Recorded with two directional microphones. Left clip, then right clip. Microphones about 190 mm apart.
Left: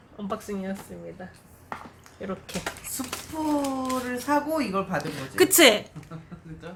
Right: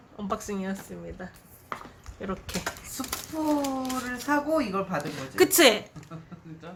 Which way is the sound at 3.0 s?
5° left (ahead or behind).